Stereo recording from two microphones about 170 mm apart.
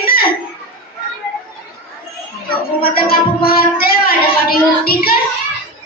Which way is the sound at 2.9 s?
60° left (ahead or behind).